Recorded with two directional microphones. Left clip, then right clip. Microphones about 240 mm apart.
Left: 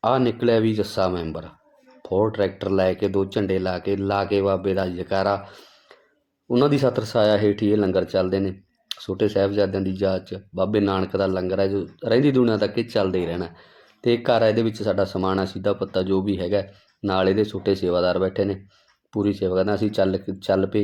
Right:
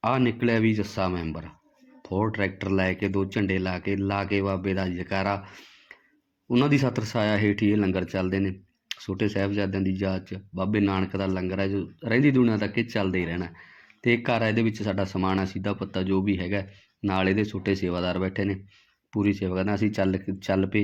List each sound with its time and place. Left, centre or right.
0.0 s speech: centre
2.0 s a sound: right
2.2 s speech: right
6.5 s speech: centre